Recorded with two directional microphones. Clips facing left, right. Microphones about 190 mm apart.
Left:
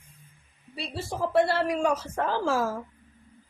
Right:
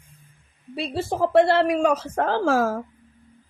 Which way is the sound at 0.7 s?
65° right (ahead or behind).